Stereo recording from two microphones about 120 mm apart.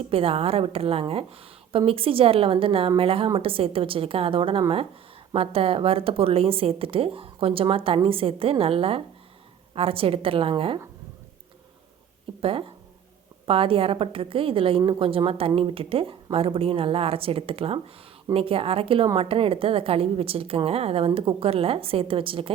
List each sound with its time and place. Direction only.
0.1 s a woman's voice: 50° right (ahead or behind)
12.4 s a woman's voice: 50° right (ahead or behind)